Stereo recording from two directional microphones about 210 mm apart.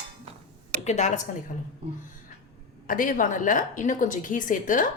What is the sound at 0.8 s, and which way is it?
Speech, 35° left (ahead or behind).